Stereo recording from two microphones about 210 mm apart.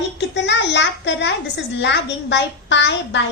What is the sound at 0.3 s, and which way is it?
A woman's voice, 55° left (ahead or behind).